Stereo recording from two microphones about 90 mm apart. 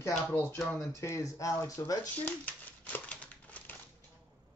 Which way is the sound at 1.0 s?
35° left (ahead or behind).